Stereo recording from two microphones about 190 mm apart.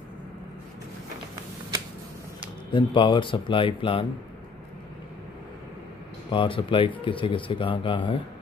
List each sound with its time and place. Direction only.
2.7 s speech: 25° left (ahead or behind)
6.3 s speech: 25° left (ahead or behind)